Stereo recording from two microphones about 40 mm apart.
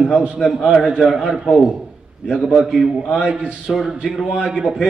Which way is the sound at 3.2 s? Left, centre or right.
Centre.